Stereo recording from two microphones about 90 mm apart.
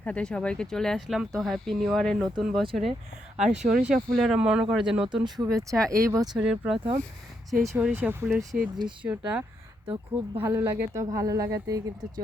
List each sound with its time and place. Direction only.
0.0 s speech: 15° left (ahead or behind); by 4.0 s 10° right (ahead or behind)
4.1 s speech: centre (ahead or behind)
4.4 s speech: 10° right (ahead or behind)
5.2 s speech: 45° right (ahead or behind)
6.3 s speech: 10° right (ahead or behind)
8.2 s speech: 30° right (ahead or behind)
10.9 s speech: 40° right (ahead or behind)